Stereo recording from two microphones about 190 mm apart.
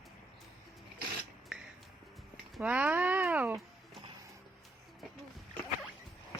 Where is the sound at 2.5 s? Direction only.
5° right (ahead or behind).